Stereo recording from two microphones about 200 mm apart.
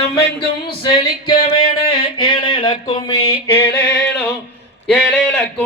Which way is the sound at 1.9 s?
25° left (ahead or behind).